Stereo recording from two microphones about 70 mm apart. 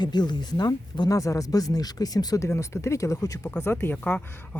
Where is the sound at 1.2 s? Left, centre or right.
Left.